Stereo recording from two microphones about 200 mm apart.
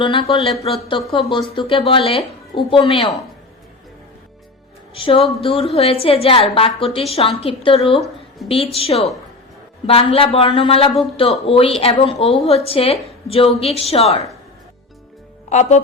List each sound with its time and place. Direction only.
0.0 s speech: 25° left (ahead or behind)
4.9 s speech: 25° left (ahead or behind)
15.4 s speech: 35° left (ahead or behind)